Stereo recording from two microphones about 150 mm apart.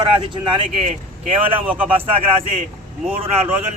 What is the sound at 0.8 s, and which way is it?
Speech, 50° right (ahead or behind).